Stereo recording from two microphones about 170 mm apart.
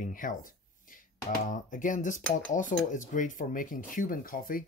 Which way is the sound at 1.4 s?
50° left (ahead or behind).